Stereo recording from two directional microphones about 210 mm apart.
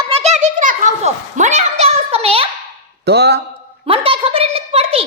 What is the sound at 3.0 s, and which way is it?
Speech, 50° right (ahead or behind).